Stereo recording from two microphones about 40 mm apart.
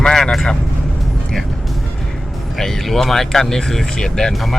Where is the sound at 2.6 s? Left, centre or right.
Centre.